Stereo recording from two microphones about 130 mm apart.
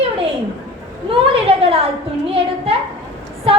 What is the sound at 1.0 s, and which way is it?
A woman's voice, 45° right (ahead or behind).